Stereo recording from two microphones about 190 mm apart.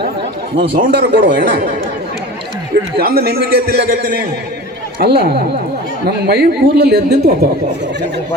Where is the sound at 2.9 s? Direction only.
55° right (ahead or behind).